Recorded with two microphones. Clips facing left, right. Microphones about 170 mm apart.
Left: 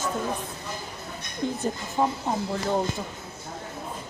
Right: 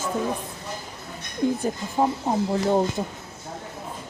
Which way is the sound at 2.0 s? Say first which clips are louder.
Right 3 dB; 25° right (ahead or behind).